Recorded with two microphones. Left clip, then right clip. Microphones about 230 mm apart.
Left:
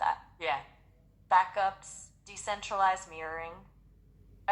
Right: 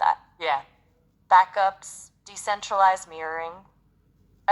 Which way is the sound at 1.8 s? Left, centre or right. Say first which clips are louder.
Right 6 dB; right.